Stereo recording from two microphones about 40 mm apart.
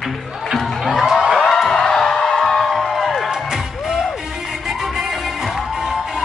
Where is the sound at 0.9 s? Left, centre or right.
Centre.